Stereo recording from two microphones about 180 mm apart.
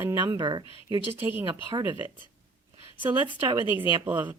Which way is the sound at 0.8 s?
15° right (ahead or behind).